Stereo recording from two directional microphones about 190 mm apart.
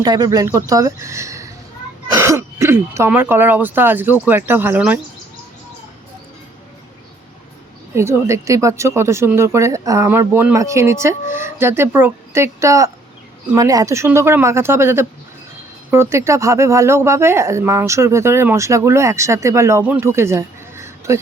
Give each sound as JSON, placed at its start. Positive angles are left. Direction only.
{"t": 0.0, "sound": "speech", "side_deg": -20}
{"t": 7.9, "sound": "speech", "side_deg": -15}